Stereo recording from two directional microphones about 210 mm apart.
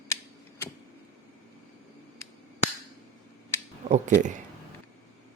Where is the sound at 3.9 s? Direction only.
35° right (ahead or behind).